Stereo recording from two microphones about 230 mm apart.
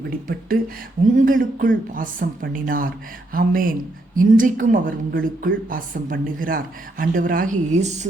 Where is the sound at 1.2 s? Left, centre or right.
Right.